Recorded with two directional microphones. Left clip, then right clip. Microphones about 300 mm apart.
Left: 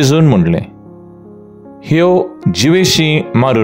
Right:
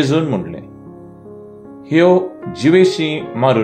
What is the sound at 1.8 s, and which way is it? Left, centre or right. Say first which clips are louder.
Speech: left 1 dB; left.